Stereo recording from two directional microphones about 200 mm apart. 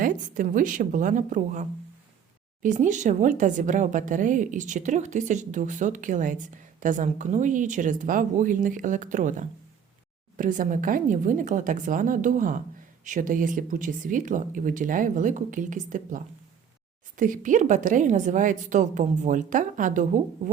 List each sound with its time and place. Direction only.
0.0 s a woman's voice: 40° right (ahead or behind)